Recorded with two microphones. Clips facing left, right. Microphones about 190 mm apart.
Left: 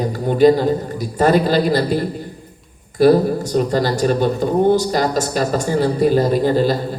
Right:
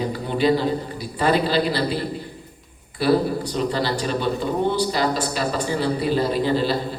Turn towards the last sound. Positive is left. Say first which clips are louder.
# left 5 dB
turn(degrees=45)  # may be behind; listen again after turning